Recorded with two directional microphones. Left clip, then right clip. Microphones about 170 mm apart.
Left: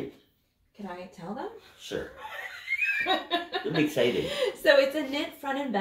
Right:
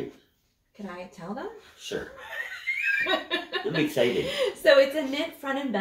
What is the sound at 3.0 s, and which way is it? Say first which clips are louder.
A woman's voice: right 1 dB; 5° left (ahead or behind).